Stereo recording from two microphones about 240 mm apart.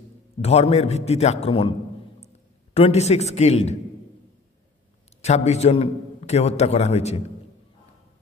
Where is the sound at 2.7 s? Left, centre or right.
Left.